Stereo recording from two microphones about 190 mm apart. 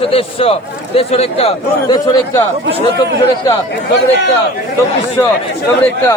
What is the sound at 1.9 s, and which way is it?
Speech, 20° left (ahead or behind).